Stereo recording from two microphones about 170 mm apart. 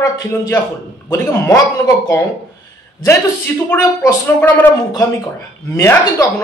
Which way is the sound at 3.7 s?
15° left (ahead or behind).